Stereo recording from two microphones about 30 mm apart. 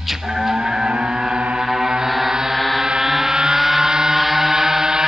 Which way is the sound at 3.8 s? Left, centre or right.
Centre.